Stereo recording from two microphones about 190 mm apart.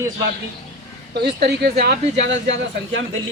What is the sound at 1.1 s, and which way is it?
Speech, 60° right (ahead or behind).